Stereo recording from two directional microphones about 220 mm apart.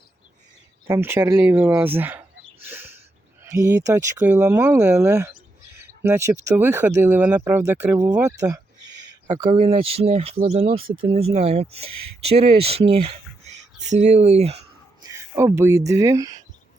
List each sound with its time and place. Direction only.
0.9 s speech: 10° right (ahead or behind)
2.6 s a sound: 10° right (ahead or behind)
3.4 s speech: 10° right (ahead or behind); by 14.6 s 30° right (ahead or behind)
15.0 s speech: 15° right (ahead or behind)